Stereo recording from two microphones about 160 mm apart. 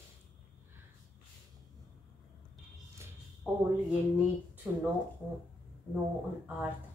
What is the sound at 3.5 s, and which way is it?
Speech, 5° right (ahead or behind).